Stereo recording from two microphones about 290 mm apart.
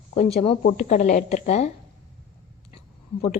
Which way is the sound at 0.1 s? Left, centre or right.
Left.